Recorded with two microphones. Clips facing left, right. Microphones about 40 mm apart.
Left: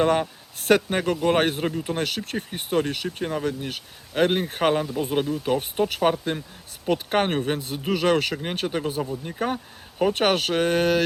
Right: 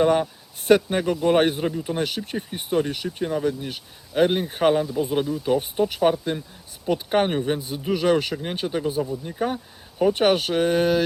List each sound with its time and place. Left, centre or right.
0.0 s a man's voice: centre
1.7 s a man's voice: centre
2.0 s a man's voice: centre
4.8 s speech: left
5.2 s a man's voice: centre
10.2 s speech: centre